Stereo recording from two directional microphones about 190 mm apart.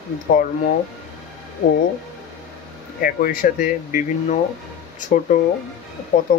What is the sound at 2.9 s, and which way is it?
Speech, 50° left (ahead or behind).